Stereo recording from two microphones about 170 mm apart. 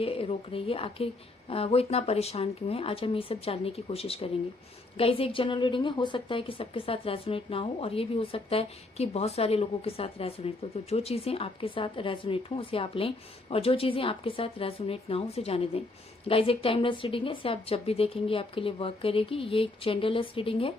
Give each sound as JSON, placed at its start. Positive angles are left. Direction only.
{"t": 0.0, "sound": "a woman's voice", "side_deg": 35}